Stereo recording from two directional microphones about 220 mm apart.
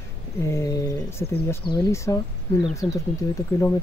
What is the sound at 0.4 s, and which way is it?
Speech, 15° left (ahead or behind).